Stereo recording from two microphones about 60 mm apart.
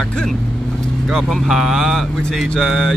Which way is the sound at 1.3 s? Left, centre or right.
Centre.